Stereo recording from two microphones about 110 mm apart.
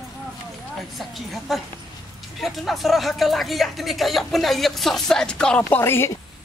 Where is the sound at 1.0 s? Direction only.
Centre (ahead or behind).